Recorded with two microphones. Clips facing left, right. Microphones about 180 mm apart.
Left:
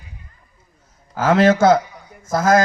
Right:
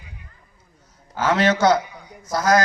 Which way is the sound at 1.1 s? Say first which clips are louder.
Left 5 dB; 50° left (ahead or behind).